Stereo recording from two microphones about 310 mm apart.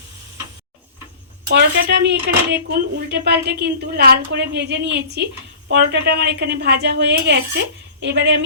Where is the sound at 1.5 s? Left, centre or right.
Right.